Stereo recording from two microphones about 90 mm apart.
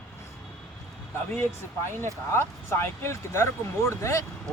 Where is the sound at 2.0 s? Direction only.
30° left (ahead or behind).